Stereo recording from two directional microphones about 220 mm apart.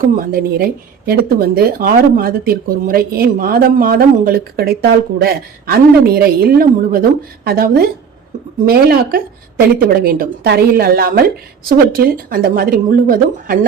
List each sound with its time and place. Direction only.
0.0 s a woman's voice: 40° right (ahead or behind)